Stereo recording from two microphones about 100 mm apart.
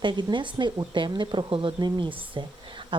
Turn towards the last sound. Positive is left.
turn(degrees=-55)  # may be behind; listen again after turning